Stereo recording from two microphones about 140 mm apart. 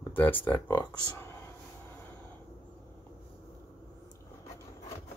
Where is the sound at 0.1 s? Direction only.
15° left (ahead or behind).